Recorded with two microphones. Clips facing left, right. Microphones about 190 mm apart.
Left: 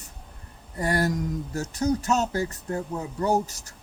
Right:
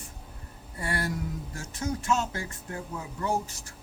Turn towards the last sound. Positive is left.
turn(degrees=40)  # may be behind; listen again after turning